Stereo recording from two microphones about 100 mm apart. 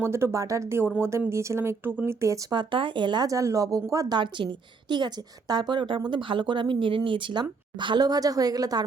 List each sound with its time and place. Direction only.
0.0 s speech: 25° right (ahead or behind)
2.5 s a woman's voice: 50° right (ahead or behind)
3.2 s speech: 35° right (ahead or behind)
4.4 s a woman's voice: 55° right (ahead or behind); by 8.8 s 40° right (ahead or behind)